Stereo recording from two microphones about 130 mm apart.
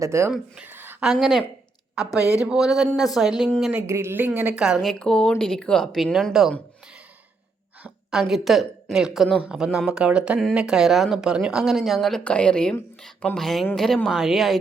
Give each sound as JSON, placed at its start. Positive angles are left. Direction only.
{"t": 0.0, "sound": "speech", "side_deg": -20}
{"t": 0.5, "sound": "a sound", "side_deg": -15}
{"t": 1.0, "sound": "speech", "side_deg": -5}
{"t": 3.8, "sound": "speech", "side_deg": -20}
{"t": 7.8, "sound": "a sound", "side_deg": -10}
{"t": 8.2, "sound": "speech", "side_deg": 0}